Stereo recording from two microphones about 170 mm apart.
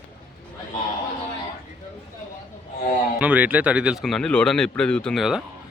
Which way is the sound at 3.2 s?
10° right (ahead or behind).